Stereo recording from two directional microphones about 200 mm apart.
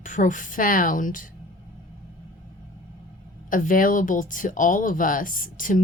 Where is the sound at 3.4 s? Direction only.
40° left (ahead or behind).